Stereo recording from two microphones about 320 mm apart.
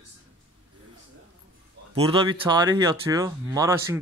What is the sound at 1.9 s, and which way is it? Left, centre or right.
Speech, centre.